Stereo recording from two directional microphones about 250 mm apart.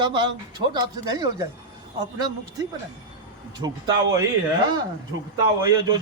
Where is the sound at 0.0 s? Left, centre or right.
Centre.